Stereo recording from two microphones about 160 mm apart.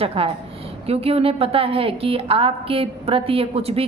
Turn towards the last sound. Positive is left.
turn(degrees=-35)  # may be behind; listen again after turning